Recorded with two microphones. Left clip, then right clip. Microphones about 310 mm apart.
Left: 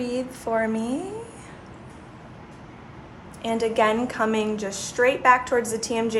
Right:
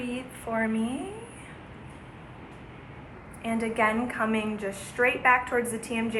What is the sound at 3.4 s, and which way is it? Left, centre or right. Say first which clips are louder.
A woman's voice: left 5 dB; left.